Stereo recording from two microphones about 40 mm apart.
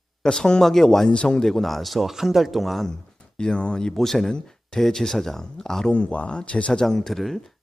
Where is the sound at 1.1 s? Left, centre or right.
Left.